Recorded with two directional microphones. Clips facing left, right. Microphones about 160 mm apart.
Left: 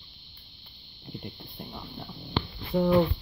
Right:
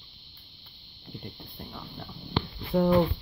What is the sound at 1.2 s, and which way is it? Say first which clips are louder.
Speech: left 1 dB; 10° left (ahead or behind).